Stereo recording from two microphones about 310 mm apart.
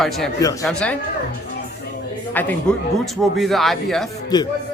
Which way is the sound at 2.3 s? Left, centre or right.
Centre.